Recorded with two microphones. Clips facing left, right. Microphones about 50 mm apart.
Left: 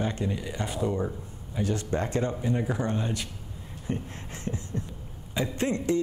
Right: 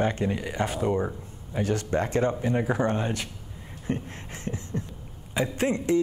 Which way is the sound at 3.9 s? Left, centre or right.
Right.